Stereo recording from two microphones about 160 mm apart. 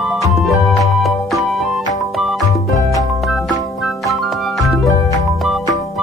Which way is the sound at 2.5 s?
20° left (ahead or behind).